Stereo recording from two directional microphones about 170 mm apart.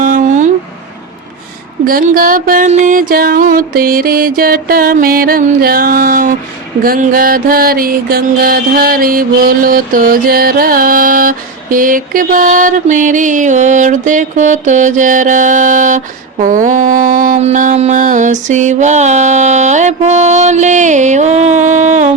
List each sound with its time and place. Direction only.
0.0 s a sound: 50° right (ahead or behind)
1.8 s music: 55° right (ahead or behind)
6.8 s mantra: 55° right (ahead or behind)